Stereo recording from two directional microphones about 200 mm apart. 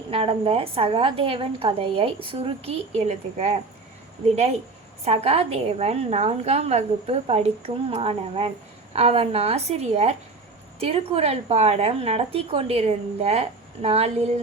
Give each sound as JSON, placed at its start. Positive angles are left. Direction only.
{"t": 0.1, "sound": "a woman's voice", "side_deg": -30}
{"t": 5.0, "sound": "a woman's voice", "side_deg": -30}